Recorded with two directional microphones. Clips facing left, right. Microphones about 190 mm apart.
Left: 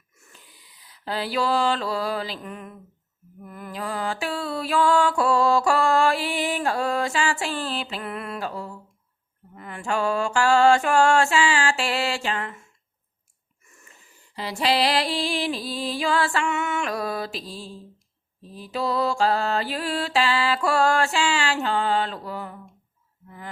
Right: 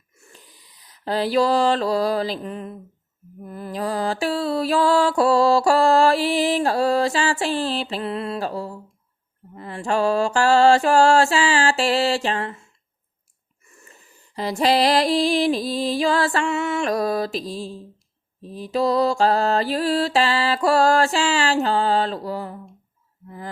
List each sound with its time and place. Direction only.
0.3 s a sound: 40° right (ahead or behind)
3.4 s mantra: 35° right (ahead or behind)
14.3 s mantra: 45° right (ahead or behind)